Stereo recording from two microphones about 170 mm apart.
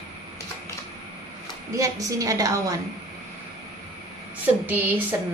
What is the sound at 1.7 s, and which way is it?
A woman's voice, 20° right (ahead or behind).